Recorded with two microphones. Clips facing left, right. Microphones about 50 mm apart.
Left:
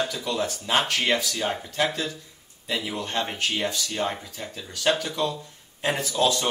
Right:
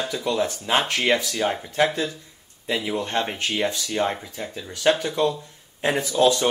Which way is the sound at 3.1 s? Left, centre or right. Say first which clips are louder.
Even; centre.